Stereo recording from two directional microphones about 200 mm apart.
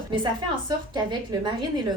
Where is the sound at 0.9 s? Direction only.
20° right (ahead or behind).